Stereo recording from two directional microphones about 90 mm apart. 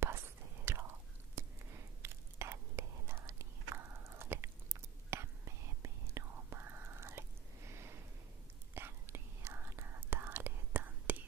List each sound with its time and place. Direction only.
0.0 s whispering: 25° right (ahead or behind)